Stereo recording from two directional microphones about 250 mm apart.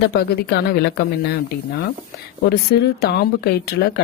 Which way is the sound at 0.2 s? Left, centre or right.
Left.